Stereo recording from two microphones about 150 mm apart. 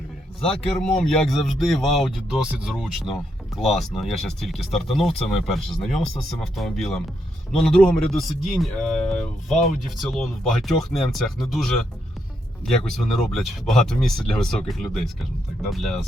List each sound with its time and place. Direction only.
0.9 s speech: 5° left (ahead or behind)